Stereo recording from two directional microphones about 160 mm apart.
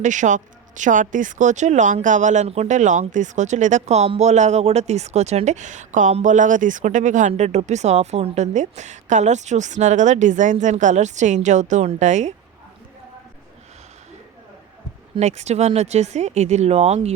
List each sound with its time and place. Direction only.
0.0 s speech: 50° right (ahead or behind)
15.2 s speech: 45° right (ahead or behind)